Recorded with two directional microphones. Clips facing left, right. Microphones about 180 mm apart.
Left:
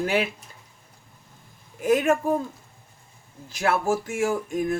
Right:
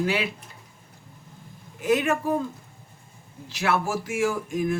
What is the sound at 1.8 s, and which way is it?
Speech, 45° left (ahead or behind).